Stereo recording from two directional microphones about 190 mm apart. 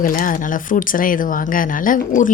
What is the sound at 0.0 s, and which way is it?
Speech, 45° left (ahead or behind).